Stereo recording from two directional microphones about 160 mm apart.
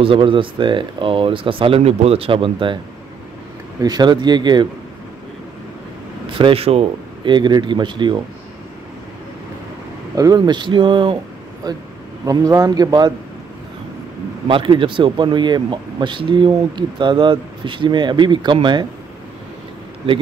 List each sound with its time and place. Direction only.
0.0 s speech: 35° right (ahead or behind)
3.8 s speech: 25° right (ahead or behind)
6.3 s speech: 35° right (ahead or behind)
10.1 s speech: 25° right (ahead or behind)
14.5 s speech: 30° right (ahead or behind)